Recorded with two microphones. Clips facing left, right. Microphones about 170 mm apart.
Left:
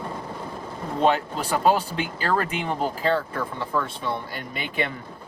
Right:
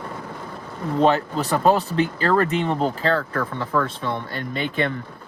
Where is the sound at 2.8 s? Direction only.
10° left (ahead or behind).